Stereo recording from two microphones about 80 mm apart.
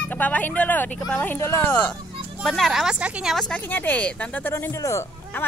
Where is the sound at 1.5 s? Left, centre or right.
Left.